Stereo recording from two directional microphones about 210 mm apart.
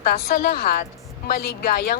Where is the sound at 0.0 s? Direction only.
45° left (ahead or behind).